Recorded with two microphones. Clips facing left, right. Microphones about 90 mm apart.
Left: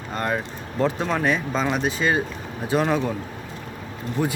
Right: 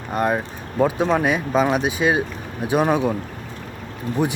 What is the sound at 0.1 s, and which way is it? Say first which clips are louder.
Speech: right 5 dB; 15° right (ahead or behind).